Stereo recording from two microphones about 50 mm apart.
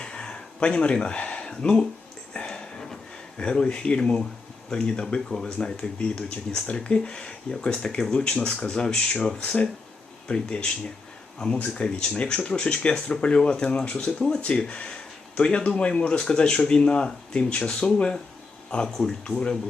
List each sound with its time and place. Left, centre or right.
0.0 s a sound: centre
4.7 s speech: centre
9.4 s speech: left
10.2 s speech: centre